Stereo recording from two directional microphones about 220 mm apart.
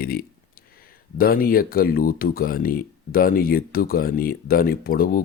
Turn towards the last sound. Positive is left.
turn(degrees=40)  # may be behind; listen again after turning